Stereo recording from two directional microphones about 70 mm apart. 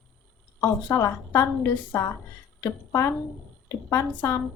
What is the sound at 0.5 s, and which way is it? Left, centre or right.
A woman's voice, left.